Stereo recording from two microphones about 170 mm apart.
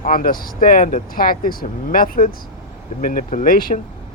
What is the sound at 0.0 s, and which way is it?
Speech, 55° left (ahead or behind).